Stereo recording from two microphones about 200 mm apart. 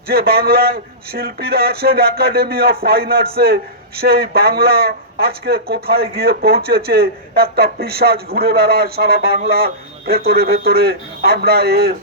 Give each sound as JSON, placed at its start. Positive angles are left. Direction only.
{"t": 0.1, "sound": "speech", "side_deg": -50}